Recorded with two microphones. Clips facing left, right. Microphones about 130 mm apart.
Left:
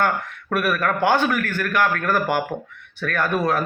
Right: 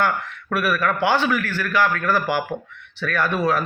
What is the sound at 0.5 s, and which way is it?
Speech, 50° left (ahead or behind).